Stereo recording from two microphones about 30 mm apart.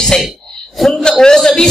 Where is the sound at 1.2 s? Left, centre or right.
Left.